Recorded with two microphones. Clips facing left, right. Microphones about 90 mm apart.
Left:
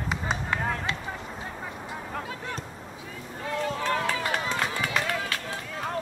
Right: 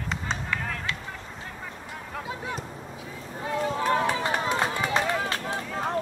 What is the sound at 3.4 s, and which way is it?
Run, 15° right (ahead or behind).